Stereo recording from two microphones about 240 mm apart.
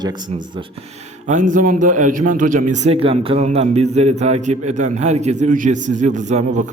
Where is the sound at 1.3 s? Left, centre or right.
Right.